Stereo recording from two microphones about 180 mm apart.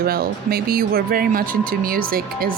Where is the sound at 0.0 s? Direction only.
55° right (ahead or behind).